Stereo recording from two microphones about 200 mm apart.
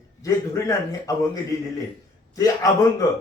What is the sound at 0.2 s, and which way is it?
Speech, 15° left (ahead or behind).